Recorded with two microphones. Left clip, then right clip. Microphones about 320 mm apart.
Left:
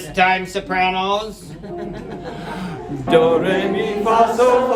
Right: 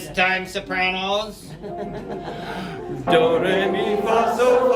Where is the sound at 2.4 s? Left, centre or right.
Centre.